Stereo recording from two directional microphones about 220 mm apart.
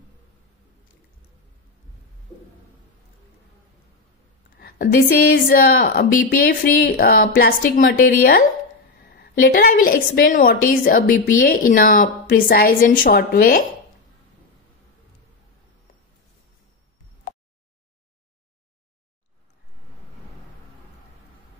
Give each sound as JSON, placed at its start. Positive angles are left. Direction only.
{"t": 4.6, "sound": "a woman's voice", "side_deg": 40}